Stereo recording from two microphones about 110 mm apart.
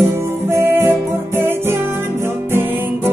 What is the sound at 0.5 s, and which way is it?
Music, 20° right (ahead or behind).